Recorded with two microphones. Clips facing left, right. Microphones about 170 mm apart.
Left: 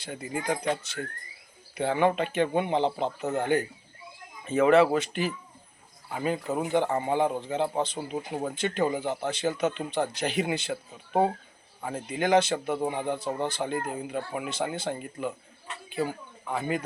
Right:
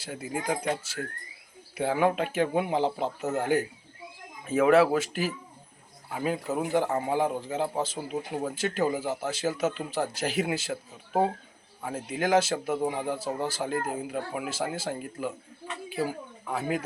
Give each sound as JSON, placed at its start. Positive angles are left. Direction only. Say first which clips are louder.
{"t": 0.0, "sound": "speech", "louder": "even", "side_deg": -5}